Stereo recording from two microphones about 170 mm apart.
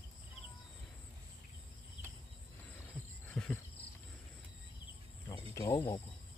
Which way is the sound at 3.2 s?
10° left (ahead or behind).